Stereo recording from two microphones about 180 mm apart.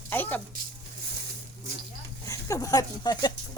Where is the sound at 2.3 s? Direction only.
15° left (ahead or behind).